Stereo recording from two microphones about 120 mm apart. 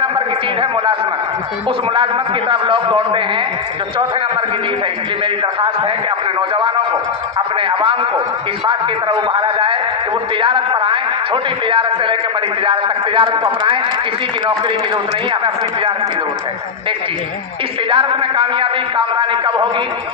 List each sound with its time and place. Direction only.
2.5 s a man's voice: 45° right (ahead or behind)
8.6 s a man's voice: 40° right (ahead or behind)
12.6 s a man's voice: 45° right (ahead or behind)
17.8 s a man's voice: 45° right (ahead or behind)